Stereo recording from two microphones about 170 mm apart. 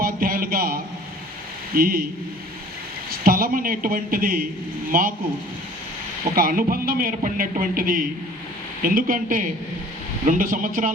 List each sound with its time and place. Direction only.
0.0 s a sound: 60° right (ahead or behind)
1.7 s a man's voice: 60° right (ahead or behind)
3.1 s a man's voice: 60° right (ahead or behind)
6.3 s a man's voice: 55° right (ahead or behind)